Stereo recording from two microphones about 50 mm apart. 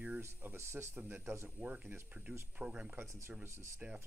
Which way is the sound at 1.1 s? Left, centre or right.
Right.